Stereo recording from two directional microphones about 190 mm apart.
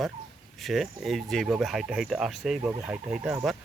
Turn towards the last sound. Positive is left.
turn(degrees=-5)  # may be behind; listen again after turning